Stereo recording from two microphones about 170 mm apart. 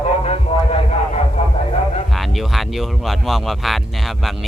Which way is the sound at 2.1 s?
Centre (ahead or behind).